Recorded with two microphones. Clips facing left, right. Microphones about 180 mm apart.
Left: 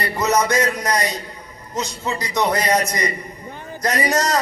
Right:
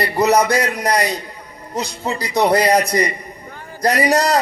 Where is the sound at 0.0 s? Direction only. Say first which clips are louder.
Right 4 dB; 35° right (ahead or behind).